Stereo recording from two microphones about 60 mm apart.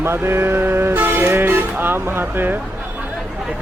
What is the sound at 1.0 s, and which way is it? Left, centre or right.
Speech, right.